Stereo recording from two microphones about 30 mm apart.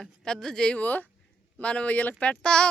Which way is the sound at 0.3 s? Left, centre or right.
Centre.